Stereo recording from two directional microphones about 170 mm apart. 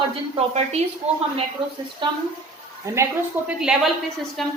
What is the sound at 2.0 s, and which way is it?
Speech, 30° right (ahead or behind).